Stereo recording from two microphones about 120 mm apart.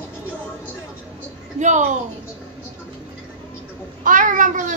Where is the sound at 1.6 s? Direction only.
90° right.